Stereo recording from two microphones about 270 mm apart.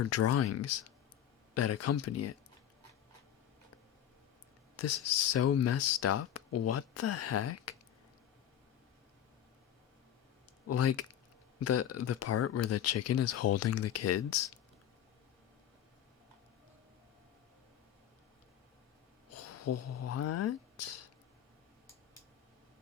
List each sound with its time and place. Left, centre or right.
0.1 s speech: left
4.8 s speech: left
10.7 s speech: left
19.5 s speech: left